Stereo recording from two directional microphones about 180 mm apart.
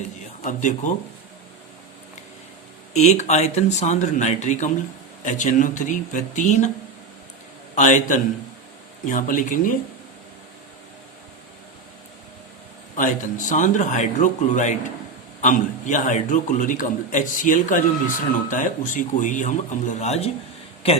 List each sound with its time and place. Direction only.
0.4 s a man's voice: 40° left (ahead or behind)
2.9 s a man's voice: 40° left (ahead or behind)
7.8 s a man's voice: 45° left (ahead or behind)
13.0 s a man's voice: 45° left (ahead or behind)